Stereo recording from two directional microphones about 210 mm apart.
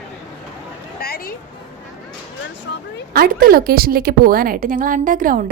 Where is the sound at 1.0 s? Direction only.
45° left (ahead or behind).